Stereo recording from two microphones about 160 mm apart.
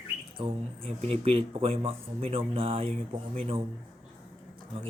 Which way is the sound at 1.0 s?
40° right (ahead or behind).